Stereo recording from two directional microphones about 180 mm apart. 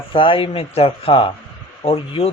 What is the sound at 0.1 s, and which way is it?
Speech, 30° left (ahead or behind).